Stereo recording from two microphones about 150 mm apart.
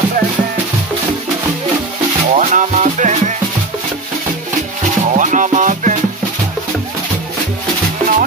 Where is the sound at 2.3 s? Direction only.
55° right (ahead or behind).